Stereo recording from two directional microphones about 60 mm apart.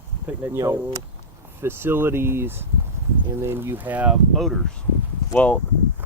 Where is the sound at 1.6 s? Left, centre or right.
Right.